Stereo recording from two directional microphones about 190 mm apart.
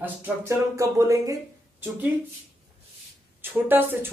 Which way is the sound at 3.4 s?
10° right (ahead or behind).